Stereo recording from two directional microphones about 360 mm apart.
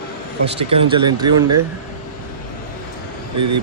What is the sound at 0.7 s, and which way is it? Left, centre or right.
Speech, centre.